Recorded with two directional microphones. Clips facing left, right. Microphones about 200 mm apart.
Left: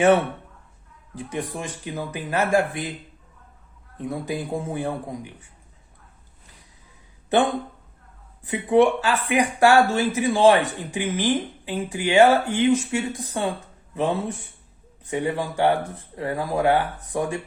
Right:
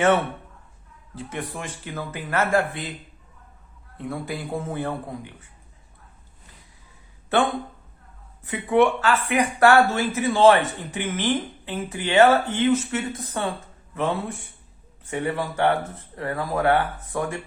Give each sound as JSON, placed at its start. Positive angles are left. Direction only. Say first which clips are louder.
{"t": 1.1, "sound": "speech", "louder": "left 2 dB", "side_deg": 15}
{"t": 3.9, "sound": "speech", "louder": "left 2 dB", "side_deg": 20}
{"t": 7.3, "sound": "speech", "louder": "left 2 dB", "side_deg": 20}